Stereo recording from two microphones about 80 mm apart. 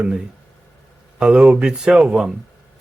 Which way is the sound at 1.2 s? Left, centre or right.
Centre.